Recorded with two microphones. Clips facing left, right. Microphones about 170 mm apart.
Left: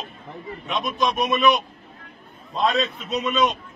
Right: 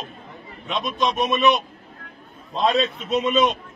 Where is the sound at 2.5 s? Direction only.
30° right (ahead or behind).